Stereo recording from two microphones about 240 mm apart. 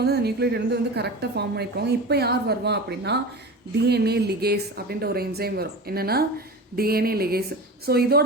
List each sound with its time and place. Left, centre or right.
0.0 s a woman's voice: right